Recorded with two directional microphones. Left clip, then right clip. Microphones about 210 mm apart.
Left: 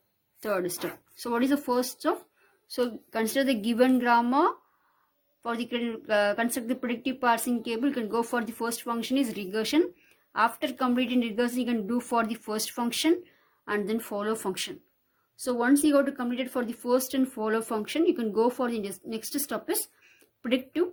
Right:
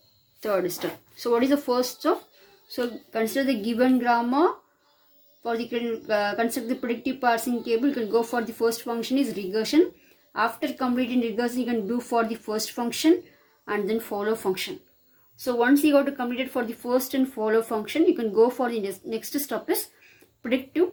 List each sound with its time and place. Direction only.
0.3 s speech: 55° left (ahead or behind)